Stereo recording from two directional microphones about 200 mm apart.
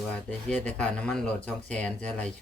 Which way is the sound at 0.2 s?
5° left (ahead or behind).